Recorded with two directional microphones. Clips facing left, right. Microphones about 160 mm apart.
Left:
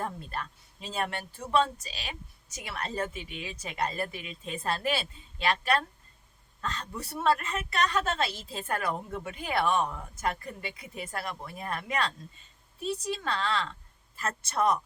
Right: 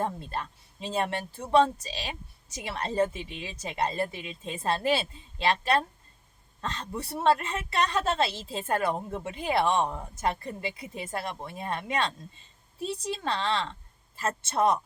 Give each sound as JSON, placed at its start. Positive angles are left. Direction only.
{"t": 0.0, "sound": "speech", "side_deg": -25}